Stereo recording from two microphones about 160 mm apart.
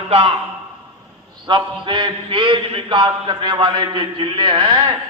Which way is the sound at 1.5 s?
30° right (ahead or behind).